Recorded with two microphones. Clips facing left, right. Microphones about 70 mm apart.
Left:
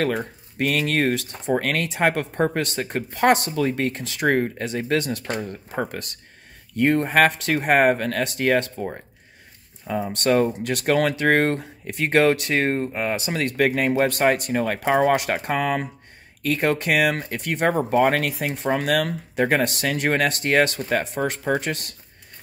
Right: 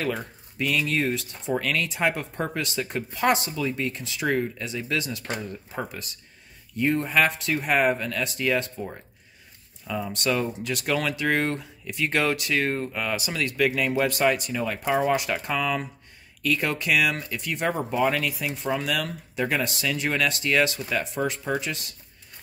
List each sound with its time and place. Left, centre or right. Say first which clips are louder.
0.6 s speech: left 3 dB; left
9.8 s speech: left 5 dB; left
12.7 s speech: left 4 dB; left